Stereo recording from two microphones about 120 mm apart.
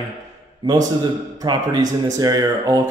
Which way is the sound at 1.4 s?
35° right (ahead or behind).